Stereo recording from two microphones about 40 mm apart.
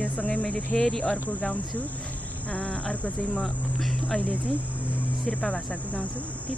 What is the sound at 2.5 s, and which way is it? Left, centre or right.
Speech, left.